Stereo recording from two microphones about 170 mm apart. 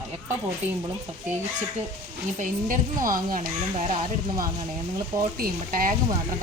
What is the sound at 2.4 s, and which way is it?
Speech, 50° right (ahead or behind).